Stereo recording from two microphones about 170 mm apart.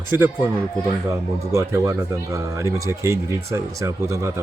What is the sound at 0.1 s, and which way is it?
Speech, 10° right (ahead or behind).